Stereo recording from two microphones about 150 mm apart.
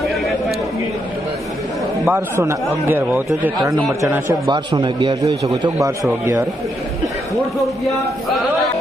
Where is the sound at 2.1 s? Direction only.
15° right (ahead or behind).